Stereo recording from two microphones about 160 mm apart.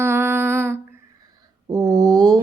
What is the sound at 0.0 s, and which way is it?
Humming, 15° right (ahead or behind).